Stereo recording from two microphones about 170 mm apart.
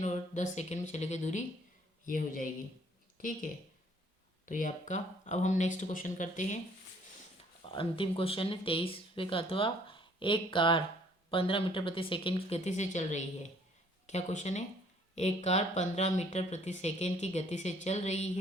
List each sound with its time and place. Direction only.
0.0 s speech: 45° left (ahead or behind)
4.4 s speech: 50° left (ahead or behind)
7.6 s speech: 30° left (ahead or behind)